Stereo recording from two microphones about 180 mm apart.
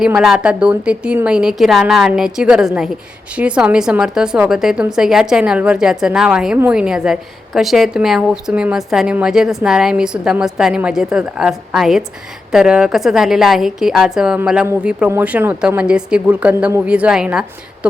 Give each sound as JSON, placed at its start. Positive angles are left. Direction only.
{"t": 0.0, "sound": "a woman's voice", "side_deg": -5}